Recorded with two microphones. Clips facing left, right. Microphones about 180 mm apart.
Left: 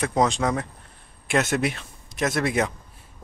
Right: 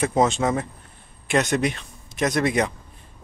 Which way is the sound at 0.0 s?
5° right (ahead or behind).